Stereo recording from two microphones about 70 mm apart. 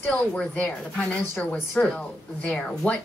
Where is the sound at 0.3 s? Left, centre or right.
Centre.